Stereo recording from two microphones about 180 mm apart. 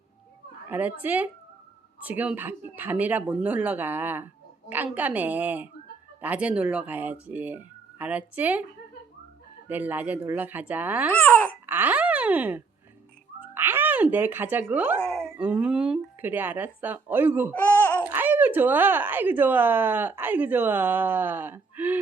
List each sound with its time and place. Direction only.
0.7 s speech: 10° right (ahead or behind)
9.6 s speech: 10° right (ahead or behind)
11.2 s babbling: 10° left (ahead or behind)
11.6 s a sound: 10° right (ahead or behind)
13.4 s speech: 10° right (ahead or behind)
15.0 s dog: 5° left (ahead or behind)
15.4 s speech: 5° right (ahead or behind)
17.5 s speech: 10° left (ahead or behind)
18.0 s speech: 10° right (ahead or behind)